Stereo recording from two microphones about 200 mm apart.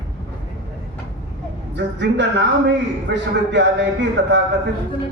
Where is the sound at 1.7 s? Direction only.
60° right (ahead or behind).